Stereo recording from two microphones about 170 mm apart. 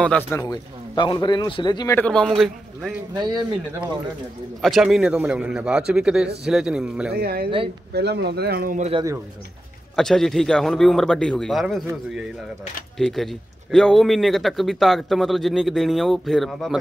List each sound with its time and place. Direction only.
0.0 s a man's voice: 10° left (ahead or behind)
0.5 s speech: 25° left (ahead or behind)
2.0 s a man's voice: 5° left (ahead or behind)
4.6 s a man's voice: centre (ahead or behind)
7.2 s speech: 65° right (ahead or behind)
7.9 s speech: 75° right (ahead or behind)
8.7 s speech: 40° right (ahead or behind)
9.9 s a man's voice: 5° left (ahead or behind)
12.9 s a man's voice: centre (ahead or behind)